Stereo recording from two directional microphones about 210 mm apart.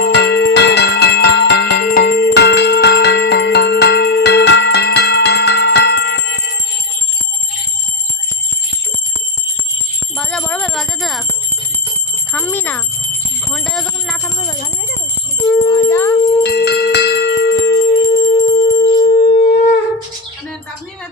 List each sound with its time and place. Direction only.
0.0 s music: 55° left (ahead or behind)
10.2 s jingle bell: 5° left (ahead or behind)
12.3 s bicycle bell: 5° left (ahead or behind)
13.5 s a sound: centre (ahead or behind)
15.6 s music: 15° left (ahead or behind)
16.4 s jingle bell: 50° left (ahead or behind)
17.7 s music: 55° left (ahead or behind)
18.0 s music: 30° left (ahead or behind); by 19.4 s 45° left (ahead or behind)